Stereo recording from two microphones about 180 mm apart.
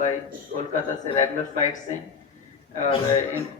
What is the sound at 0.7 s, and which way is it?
Speech, 40° left (ahead or behind).